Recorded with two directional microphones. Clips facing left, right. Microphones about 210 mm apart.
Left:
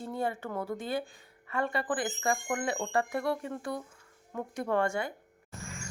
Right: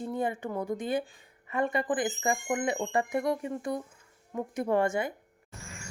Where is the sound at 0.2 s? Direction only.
15° right (ahead or behind).